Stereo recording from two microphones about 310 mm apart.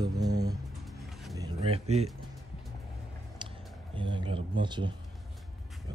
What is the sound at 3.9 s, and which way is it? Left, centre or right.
Speech, centre.